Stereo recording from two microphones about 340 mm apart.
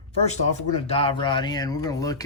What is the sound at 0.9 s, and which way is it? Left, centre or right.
Speech, centre.